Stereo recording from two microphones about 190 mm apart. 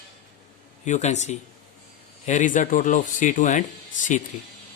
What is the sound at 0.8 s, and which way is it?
Speech, 40° left (ahead or behind).